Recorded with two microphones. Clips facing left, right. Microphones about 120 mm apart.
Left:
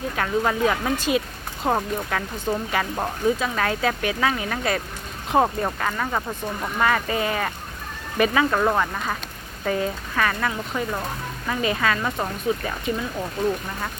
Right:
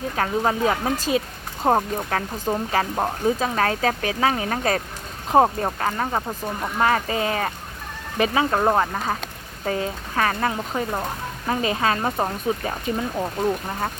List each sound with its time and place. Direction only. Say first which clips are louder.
0.2 s speech: even; 30° right (ahead or behind)
2.5 s speech: right 2 dB; 25° right (ahead or behind)